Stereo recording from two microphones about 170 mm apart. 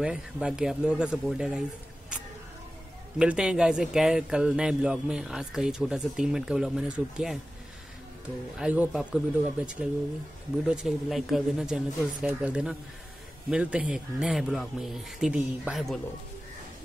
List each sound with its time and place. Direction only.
0.0 s speech: 5° right (ahead or behind)
3.2 s speech: 5° right (ahead or behind)
8.5 s speech: 5° right (ahead or behind)